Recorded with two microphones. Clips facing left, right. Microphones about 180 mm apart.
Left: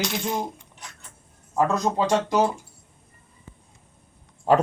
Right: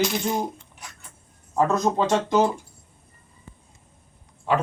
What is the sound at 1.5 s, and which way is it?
Speech, 10° left (ahead or behind).